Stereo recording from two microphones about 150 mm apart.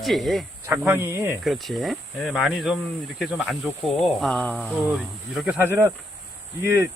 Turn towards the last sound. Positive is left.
turn(degrees=-20)  # may be behind; listen again after turning